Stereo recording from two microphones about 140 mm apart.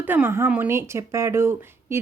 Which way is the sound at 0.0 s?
15° right (ahead or behind).